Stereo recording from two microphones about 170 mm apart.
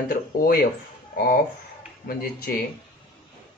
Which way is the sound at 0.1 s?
65° left (ahead or behind).